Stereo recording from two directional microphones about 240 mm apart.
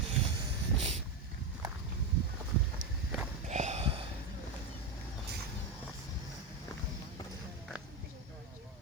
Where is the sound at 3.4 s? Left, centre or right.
Right.